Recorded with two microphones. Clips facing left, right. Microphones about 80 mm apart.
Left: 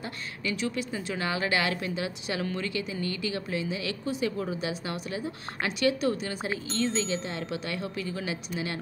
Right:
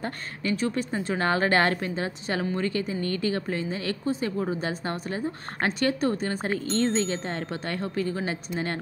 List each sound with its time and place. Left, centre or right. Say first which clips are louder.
0.5 s speech: right 4 dB; right